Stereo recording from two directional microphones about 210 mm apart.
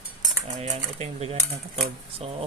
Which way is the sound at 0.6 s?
30° right (ahead or behind).